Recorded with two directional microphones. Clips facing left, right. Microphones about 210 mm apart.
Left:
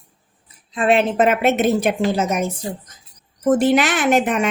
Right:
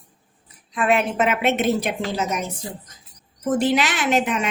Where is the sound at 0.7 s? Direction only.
30° left (ahead or behind).